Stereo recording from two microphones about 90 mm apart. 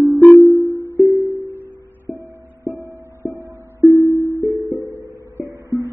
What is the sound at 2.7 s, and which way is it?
Music, 30° right (ahead or behind).